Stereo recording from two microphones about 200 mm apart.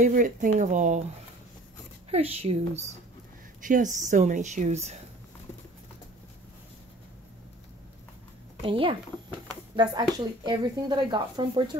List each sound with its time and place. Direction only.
0.0 s speech: 40° right (ahead or behind)
2.0 s speech: 30° right (ahead or behind)
8.6 s speech: 25° right (ahead or behind)